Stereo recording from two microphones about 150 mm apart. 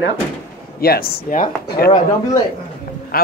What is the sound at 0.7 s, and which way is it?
Speech, 90° left.